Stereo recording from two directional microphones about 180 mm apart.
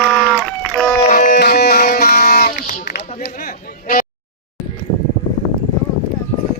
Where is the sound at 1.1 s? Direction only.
50° left (ahead or behind).